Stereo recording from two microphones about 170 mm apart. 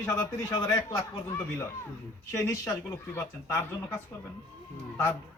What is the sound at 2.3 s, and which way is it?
Speech, 20° left (ahead or behind).